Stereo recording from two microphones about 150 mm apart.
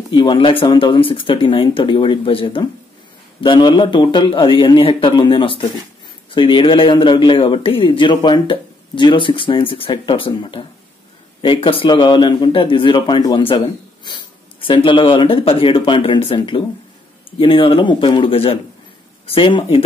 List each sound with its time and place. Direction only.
0.1 s speech: 30° left (ahead or behind)